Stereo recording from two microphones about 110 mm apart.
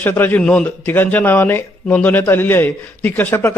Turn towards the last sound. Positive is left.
turn(degrees=20)  # may be behind; listen again after turning